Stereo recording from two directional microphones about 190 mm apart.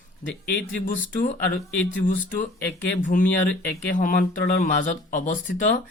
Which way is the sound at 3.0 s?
45° left (ahead or behind).